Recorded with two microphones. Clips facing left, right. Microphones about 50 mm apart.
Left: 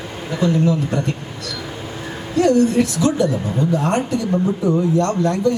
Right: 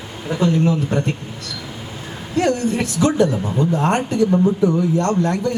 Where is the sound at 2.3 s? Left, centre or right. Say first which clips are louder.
Left 4 dB; right.